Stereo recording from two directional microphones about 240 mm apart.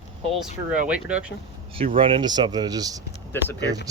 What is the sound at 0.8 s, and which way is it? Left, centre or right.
Speech, centre.